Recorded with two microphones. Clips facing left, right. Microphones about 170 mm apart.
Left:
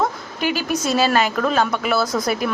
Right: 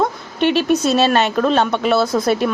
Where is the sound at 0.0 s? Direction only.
25° right (ahead or behind).